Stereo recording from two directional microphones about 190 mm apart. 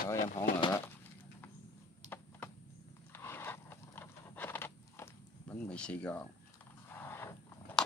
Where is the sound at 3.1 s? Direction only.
10° left (ahead or behind).